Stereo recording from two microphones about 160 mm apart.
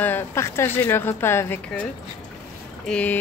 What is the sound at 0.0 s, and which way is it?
A woman's voice, 15° left (ahead or behind).